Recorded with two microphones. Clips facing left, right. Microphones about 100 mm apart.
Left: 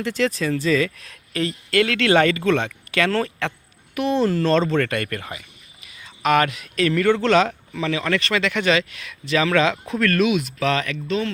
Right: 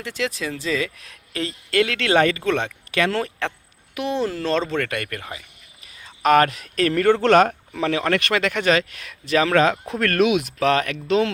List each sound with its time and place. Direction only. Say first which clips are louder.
0.0 s speech: left 5 dB; 10° right (ahead or behind)
5.8 s speech: right 2 dB; 35° right (ahead or behind)